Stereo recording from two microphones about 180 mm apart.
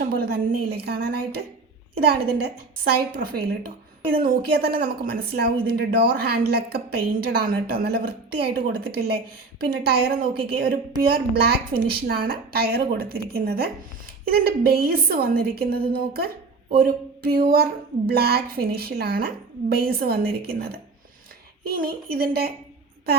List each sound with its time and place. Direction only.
0.0 s a woman's voice: 55° right (ahead or behind)